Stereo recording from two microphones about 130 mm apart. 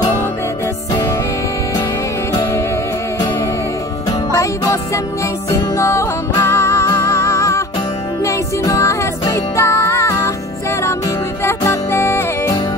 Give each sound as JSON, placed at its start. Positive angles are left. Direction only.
{"t": 5.5, "sound": "music", "side_deg": 20}
{"t": 11.4, "sound": "music", "side_deg": 20}